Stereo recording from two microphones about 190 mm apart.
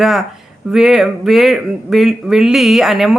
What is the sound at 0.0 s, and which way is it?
Speech, centre (ahead or behind).